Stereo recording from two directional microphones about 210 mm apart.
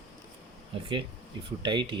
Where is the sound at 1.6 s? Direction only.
20° right (ahead or behind).